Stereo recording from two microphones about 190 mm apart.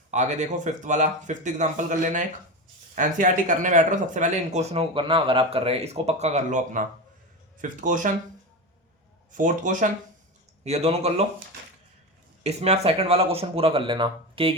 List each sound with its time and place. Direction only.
0.1 s speech: 35° right (ahead or behind)
9.4 s speech: 45° right (ahead or behind)
12.4 s speech: 35° right (ahead or behind)